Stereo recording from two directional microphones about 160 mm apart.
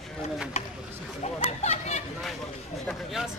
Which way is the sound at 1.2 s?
45° left (ahead or behind).